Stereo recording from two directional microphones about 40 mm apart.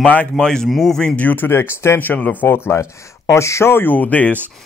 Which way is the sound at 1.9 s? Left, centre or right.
Left.